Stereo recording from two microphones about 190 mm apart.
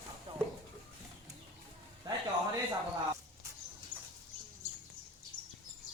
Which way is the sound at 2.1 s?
25° right (ahead or behind).